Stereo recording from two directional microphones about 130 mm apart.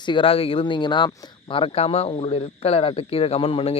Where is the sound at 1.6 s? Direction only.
50° left (ahead or behind).